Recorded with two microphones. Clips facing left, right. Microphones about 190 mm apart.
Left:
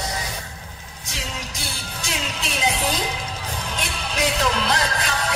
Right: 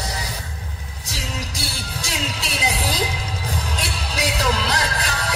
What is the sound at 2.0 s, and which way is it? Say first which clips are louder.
Music: even; 35° right (ahead or behind).